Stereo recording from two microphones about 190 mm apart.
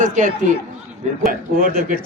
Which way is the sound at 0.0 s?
40° right (ahead or behind).